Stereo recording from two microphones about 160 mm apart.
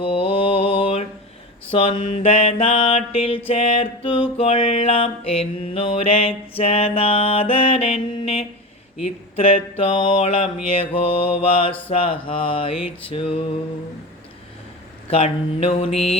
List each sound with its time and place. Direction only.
0.0 s mantra: 35° left (ahead or behind)
15.1 s mantra: 40° left (ahead or behind)